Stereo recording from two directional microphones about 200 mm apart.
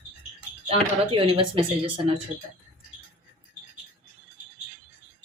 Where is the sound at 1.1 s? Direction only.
25° right (ahead or behind).